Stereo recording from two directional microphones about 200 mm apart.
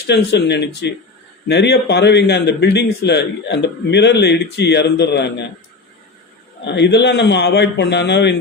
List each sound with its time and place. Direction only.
0.1 s a man's voice: 55° left (ahead or behind)
6.7 s a man's voice: 60° left (ahead or behind)